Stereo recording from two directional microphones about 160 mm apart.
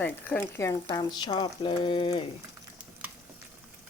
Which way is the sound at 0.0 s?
10° left (ahead or behind).